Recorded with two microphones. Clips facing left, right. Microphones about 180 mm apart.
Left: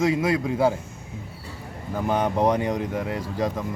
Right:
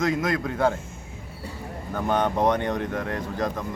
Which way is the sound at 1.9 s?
10° left (ahead or behind).